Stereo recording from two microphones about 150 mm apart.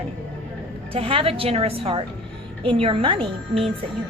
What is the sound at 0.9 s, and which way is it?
A woman's voice, 40° right (ahead or behind).